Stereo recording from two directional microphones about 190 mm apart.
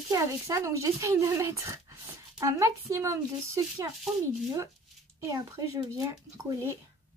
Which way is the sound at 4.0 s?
Centre (ahead or behind).